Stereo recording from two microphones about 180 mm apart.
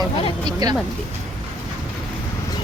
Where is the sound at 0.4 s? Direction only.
20° right (ahead or behind).